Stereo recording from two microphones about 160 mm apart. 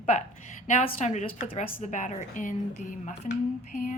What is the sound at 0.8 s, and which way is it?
Speech, 45° left (ahead or behind).